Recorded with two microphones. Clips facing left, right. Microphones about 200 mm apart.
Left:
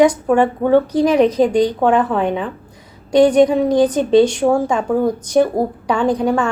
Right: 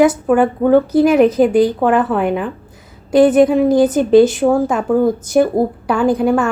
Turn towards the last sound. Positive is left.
turn(degrees=-5)  # may be behind; listen again after turning